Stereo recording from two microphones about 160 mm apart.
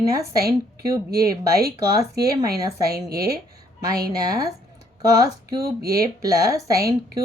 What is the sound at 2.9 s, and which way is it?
Speech, 75° right (ahead or behind).